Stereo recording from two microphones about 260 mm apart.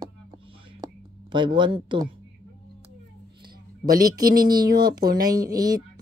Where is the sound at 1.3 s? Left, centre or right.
Centre.